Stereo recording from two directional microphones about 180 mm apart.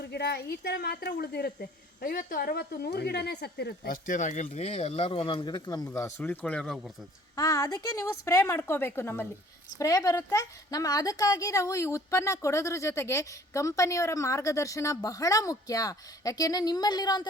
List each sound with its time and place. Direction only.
0.0 s a woman's voice: 65° left (ahead or behind)
4.0 s speech: 45° left (ahead or behind); by 6.8 s centre (ahead or behind)
7.3 s a woman's voice: 20° left (ahead or behind)